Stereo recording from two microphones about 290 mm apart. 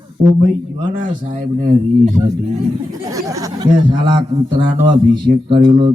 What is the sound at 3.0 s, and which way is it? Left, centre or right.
A man's voice, centre.